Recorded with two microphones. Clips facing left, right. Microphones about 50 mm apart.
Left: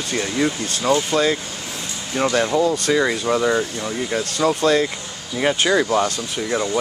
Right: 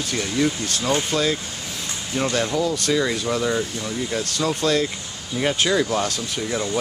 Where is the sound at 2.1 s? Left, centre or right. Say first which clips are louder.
Left 3 dB; left.